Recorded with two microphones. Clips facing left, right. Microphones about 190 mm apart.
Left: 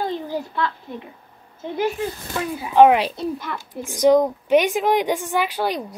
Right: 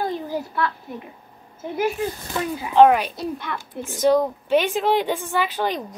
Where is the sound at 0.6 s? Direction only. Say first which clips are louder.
Even; 20° left (ahead or behind).